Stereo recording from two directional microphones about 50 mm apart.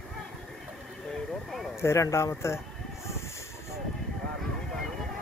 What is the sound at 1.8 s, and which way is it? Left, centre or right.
Speech, left.